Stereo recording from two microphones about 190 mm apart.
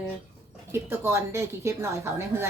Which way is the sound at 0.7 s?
15° right (ahead or behind).